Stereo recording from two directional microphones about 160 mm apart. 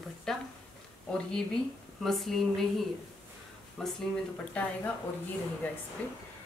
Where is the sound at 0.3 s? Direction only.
5° left (ahead or behind).